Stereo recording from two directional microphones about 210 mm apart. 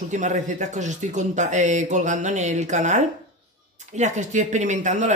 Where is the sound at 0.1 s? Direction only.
35° right (ahead or behind).